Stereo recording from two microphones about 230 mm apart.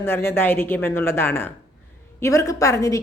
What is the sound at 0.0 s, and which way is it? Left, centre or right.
A woman's voice, centre.